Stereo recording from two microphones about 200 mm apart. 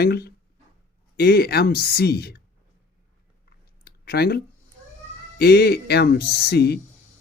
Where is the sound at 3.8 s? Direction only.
50° left (ahead or behind).